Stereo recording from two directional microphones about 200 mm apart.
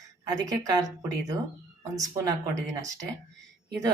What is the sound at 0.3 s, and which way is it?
Speech, 15° right (ahead or behind).